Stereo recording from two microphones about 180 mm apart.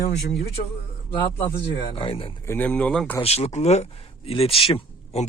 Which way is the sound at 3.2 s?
35° left (ahead or behind).